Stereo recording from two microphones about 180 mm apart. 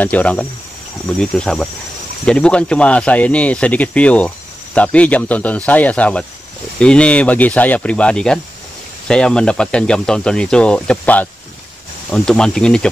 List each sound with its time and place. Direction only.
0.0 s speech: 10° left (ahead or behind)